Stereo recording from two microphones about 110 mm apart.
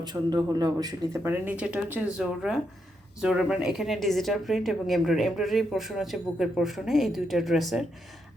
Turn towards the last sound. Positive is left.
turn(degrees=0)  # may be behind; listen again after turning